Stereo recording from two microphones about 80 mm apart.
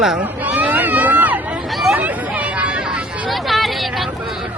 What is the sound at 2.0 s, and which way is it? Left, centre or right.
Hubbub, centre.